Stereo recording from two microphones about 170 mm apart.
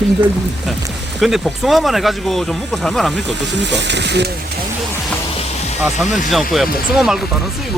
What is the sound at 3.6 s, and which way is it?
Speech, 90° right.